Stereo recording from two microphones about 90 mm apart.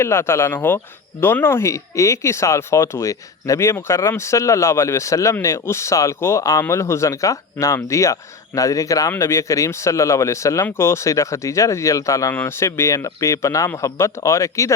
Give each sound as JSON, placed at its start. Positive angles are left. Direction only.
{"t": 0.0, "sound": "speech", "side_deg": 30}
{"t": 12.3, "sound": "speech", "side_deg": 25}